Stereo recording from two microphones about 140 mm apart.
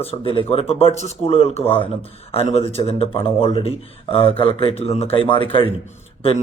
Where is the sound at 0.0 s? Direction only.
45° left (ahead or behind).